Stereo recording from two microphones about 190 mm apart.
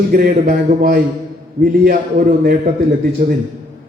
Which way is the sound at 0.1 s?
50° right (ahead or behind).